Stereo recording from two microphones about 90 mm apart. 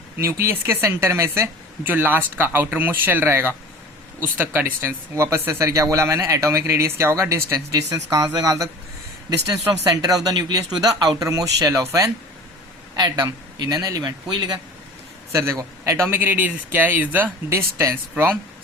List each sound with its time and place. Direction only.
0.2 s speech: 30° right (ahead or behind)
13.0 s speech: 45° right (ahead or behind)
15.3 s speech: 35° right (ahead or behind)